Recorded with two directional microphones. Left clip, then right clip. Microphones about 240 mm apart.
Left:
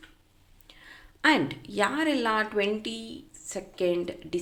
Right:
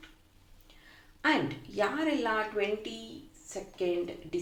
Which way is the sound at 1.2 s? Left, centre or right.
Left.